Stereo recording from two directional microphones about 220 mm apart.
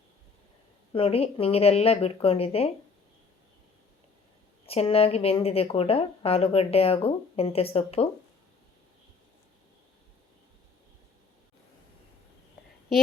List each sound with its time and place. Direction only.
0.9 s a woman's voice: 25° left (ahead or behind)
4.6 s a woman's voice: 25° left (ahead or behind)